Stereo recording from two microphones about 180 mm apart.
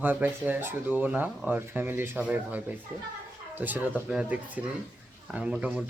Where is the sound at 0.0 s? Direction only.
10° right (ahead or behind).